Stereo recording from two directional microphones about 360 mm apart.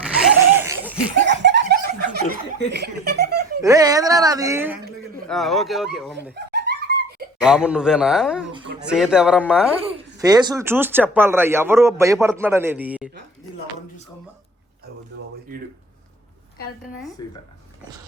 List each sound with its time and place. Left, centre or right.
0.0 s a sound: centre
1.2 s laughter: right
2.6 s giggle: right
3.6 s a man's voice: centre
6.3 s snicker: right
7.4 s a man's voice: centre
17.2 s speech: centre